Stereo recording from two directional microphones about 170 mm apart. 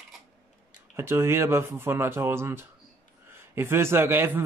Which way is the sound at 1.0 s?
15° right (ahead or behind).